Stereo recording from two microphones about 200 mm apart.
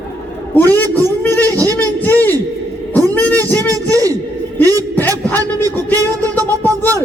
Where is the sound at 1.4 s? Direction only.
15° right (ahead or behind).